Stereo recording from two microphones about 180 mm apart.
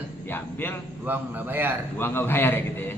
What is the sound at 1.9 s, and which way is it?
A man's voice, 10° left (ahead or behind).